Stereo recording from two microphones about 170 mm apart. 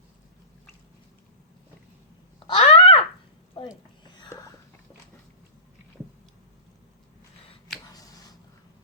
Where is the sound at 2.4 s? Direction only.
30° left (ahead or behind).